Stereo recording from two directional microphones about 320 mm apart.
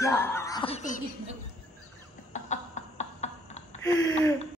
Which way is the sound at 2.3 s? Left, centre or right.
Left.